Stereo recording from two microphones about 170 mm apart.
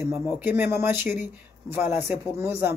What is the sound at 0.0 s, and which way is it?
Speech, 15° right (ahead or behind).